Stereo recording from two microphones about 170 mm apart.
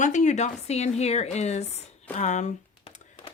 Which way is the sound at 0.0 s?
45° left (ahead or behind).